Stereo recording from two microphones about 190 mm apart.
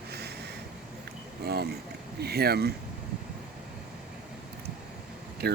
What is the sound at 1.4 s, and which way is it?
Speech, 55° right (ahead or behind).